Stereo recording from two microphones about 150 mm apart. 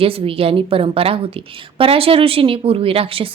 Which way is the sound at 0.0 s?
40° right (ahead or behind).